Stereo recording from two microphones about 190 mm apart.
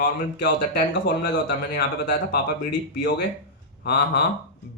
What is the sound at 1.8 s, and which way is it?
Speech, 60° left (ahead or behind).